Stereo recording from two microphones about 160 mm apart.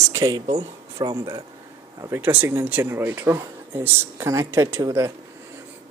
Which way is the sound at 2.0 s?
15° right (ahead or behind).